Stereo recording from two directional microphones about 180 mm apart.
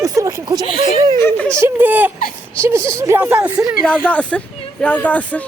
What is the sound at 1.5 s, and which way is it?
Speech, 10° right (ahead or behind).